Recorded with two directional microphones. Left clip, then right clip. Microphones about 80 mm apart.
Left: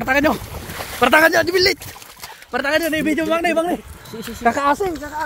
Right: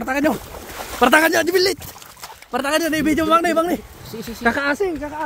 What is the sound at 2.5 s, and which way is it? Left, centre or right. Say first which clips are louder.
Speech: left 1 dB; right.